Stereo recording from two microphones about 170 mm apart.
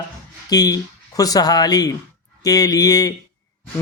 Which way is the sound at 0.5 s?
20° left (ahead or behind).